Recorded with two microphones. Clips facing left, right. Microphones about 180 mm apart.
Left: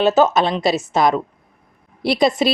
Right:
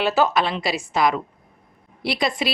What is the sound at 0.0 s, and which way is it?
A woman's voice, 20° left (ahead or behind).